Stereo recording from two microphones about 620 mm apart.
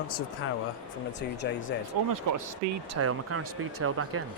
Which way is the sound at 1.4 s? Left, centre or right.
Centre.